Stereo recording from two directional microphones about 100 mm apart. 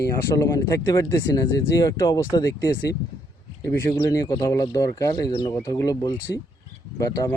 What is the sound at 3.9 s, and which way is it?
Speech, 35° left (ahead or behind).